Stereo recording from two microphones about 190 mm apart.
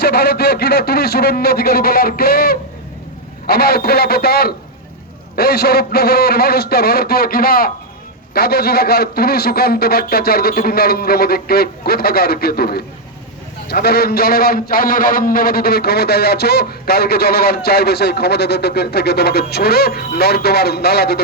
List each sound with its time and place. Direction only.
0.0 s a man's voice: 55° left (ahead or behind)